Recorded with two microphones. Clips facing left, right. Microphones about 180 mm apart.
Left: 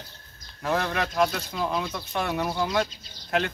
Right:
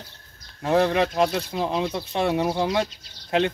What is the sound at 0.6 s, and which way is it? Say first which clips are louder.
Speech: right 7 dB; 30° right (ahead or behind).